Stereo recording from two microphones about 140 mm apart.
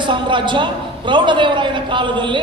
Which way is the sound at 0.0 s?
35° right (ahead or behind).